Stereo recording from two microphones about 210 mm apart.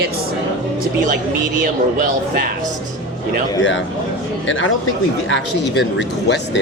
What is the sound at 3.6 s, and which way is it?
Speech, 60° left (ahead or behind).